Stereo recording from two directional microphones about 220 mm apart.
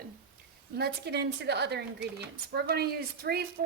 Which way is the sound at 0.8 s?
50° right (ahead or behind).